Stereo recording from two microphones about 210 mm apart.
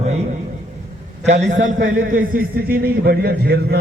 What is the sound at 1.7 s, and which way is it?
A man's voice, 40° right (ahead or behind).